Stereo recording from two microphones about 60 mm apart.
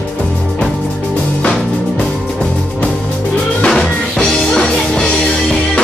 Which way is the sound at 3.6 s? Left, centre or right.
Centre.